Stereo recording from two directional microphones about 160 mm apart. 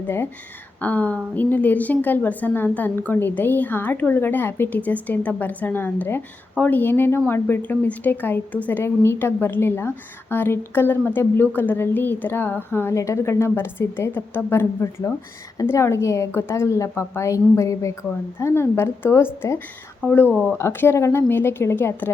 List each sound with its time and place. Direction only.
0.8 s a woman's voice: 10° left (ahead or behind)